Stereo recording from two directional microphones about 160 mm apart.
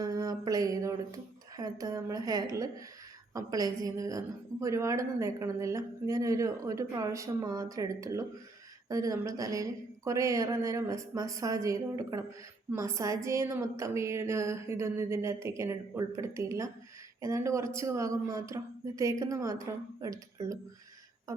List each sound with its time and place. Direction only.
0.0 s a woman's voice: 25° right (ahead or behind)